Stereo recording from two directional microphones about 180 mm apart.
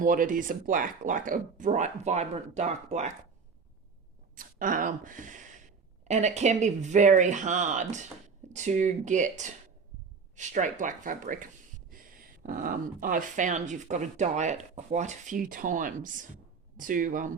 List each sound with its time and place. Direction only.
0.0 s speech: 50° right (ahead or behind)
4.4 s speech: 50° right (ahead or behind)